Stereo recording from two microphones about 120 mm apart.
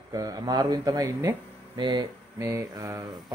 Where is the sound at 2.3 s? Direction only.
25° right (ahead or behind).